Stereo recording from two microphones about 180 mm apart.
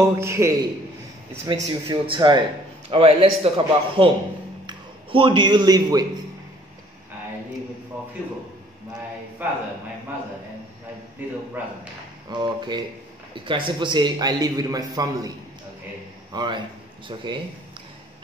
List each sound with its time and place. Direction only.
0.0 s a man's voice: 15° right (ahead or behind)
1.5 s a man's voice: 30° right (ahead or behind)
7.9 s a man's voice: 5° right (ahead or behind)
11.2 s a man's voice: 10° right (ahead or behind)
12.3 s a man's voice: 25° right (ahead or behind)
16.3 s a man's voice: 25° right (ahead or behind)